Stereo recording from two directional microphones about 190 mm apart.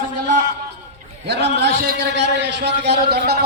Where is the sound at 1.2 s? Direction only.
60° right (ahead or behind).